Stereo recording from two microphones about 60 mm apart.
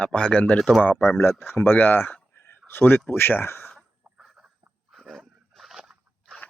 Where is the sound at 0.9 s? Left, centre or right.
Left.